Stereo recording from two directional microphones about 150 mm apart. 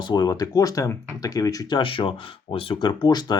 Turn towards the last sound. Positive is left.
turn(degrees=25)  # may be behind; listen again after turning